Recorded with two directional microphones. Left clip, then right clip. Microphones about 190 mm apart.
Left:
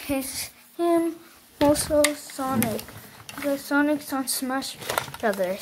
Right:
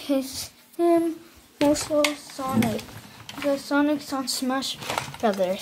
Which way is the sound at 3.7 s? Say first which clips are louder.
Even; centre (ahead or behind).